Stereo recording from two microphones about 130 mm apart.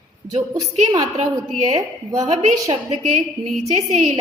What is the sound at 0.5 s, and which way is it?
Speech, 30° right (ahead or behind).